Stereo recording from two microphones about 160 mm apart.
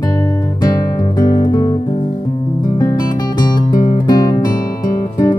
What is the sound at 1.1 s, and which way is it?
Music, 25° left (ahead or behind).